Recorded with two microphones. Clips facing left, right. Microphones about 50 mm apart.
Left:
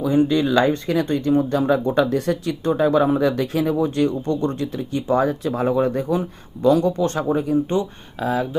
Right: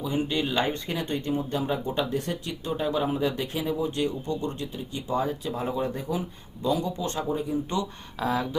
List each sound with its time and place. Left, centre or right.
0.0 s speech: left
1.0 s speech: left
1.5 s speech: left
7.7 s speech: left